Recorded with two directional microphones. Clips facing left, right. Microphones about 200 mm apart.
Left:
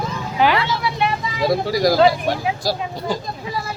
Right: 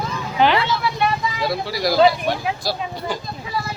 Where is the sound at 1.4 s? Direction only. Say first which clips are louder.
Left 9 dB; 45° left (ahead or behind).